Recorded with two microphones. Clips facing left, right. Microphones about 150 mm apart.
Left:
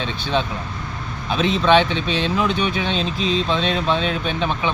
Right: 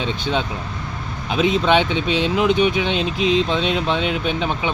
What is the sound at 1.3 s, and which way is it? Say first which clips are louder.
Speech: even; 15° right (ahead or behind).